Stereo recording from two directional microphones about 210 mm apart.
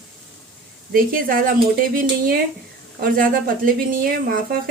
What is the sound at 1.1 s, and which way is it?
Speech, 45° right (ahead or behind).